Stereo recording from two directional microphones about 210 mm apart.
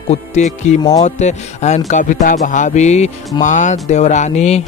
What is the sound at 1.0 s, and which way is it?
Speech, 35° left (ahead or behind).